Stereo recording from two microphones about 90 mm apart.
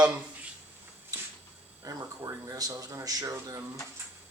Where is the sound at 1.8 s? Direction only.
40° right (ahead or behind).